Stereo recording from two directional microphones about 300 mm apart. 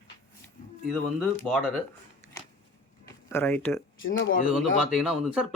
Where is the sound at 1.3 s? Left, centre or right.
Centre.